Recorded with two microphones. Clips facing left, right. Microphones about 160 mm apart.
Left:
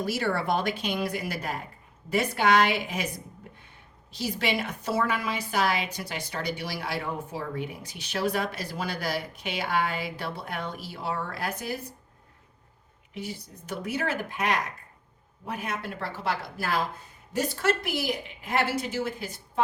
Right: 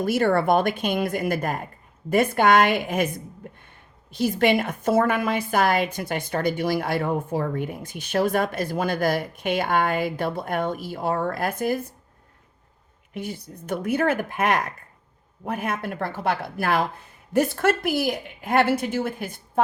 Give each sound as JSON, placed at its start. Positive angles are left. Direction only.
{"t": 0.0, "sound": "a woman's voice", "side_deg": -50}
{"t": 13.1, "sound": "a woman's voice", "side_deg": -55}